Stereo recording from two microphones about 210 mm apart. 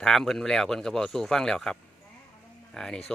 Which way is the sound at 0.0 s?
Centre (ahead or behind).